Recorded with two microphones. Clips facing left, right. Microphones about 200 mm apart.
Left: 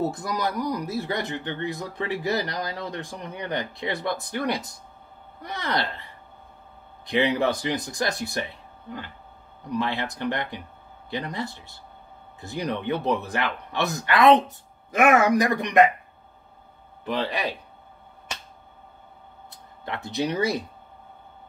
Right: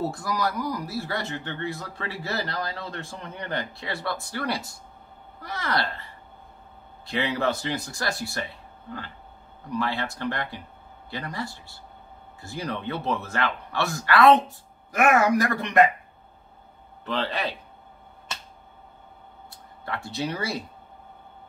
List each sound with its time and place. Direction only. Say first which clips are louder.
0.0 s speech: left 1 dB; 20° left (ahead or behind)
7.1 s speech: left 4 dB; 20° left (ahead or behind)
9.7 s speech: left 1 dB; 20° left (ahead or behind)
17.0 s speech: left 1 dB; 15° left (ahead or behind)
19.5 s speech: even; 20° left (ahead or behind)